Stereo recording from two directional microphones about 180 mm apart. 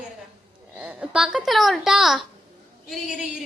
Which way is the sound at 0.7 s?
5° right (ahead or behind).